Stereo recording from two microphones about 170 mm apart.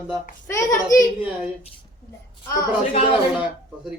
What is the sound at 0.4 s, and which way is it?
Child singing, 15° left (ahead or behind).